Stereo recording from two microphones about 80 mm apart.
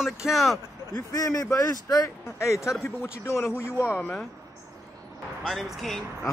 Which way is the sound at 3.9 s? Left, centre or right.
Centre.